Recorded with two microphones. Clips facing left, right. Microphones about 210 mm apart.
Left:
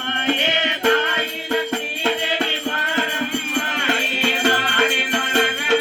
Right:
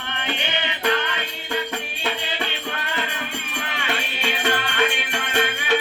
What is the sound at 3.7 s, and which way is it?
Music, 45° left (ahead or behind).